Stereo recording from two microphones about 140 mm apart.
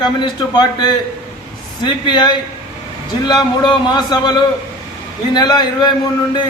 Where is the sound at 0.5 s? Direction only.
30° left (ahead or behind).